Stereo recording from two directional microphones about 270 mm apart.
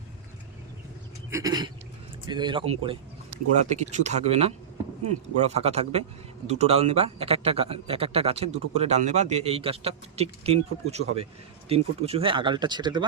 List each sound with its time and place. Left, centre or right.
1.3 s a man's voice: centre